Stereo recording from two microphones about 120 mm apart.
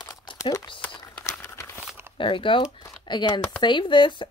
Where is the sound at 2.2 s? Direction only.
45° left (ahead or behind).